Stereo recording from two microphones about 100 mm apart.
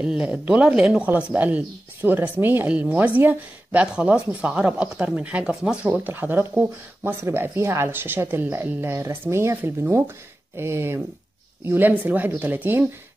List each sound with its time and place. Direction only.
0.0 s a woman's voice: 10° right (ahead or behind)